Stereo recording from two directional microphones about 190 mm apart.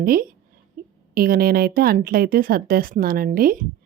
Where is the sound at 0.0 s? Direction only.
50° right (ahead or behind).